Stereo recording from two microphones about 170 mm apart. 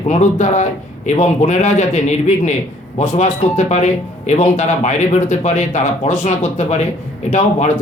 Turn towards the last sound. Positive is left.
turn(degrees=45)  # may be behind; listen again after turning